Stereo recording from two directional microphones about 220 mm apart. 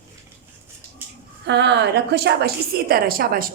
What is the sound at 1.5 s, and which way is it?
Speech, 50° right (ahead or behind).